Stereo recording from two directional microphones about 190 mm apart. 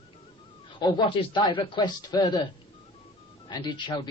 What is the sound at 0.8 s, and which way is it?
A man's voice, 25° left (ahead or behind).